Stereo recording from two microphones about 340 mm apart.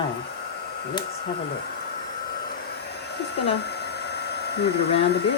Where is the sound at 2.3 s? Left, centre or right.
Left.